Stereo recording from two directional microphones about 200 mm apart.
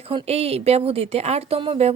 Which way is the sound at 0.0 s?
30° right (ahead or behind).